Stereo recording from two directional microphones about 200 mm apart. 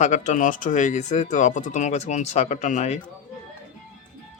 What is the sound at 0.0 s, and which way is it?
Speech, 40° left (ahead or behind).